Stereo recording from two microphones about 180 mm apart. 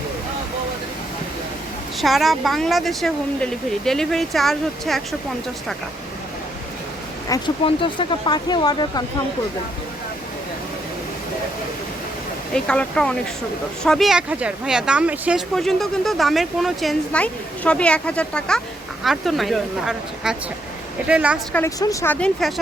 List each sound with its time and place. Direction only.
2.0 s speech: centre (ahead or behind)
7.3 s speech: 25° left (ahead or behind)
12.5 s a woman's voice: 5° left (ahead or behind)
21.5 s speech: 15° left (ahead or behind); by 22.6 s centre (ahead or behind)